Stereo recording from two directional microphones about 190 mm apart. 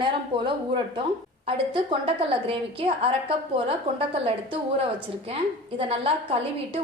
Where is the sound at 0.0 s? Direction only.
25° right (ahead or behind).